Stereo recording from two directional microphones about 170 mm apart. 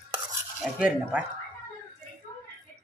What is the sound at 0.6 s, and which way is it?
Speech, 5° right (ahead or behind).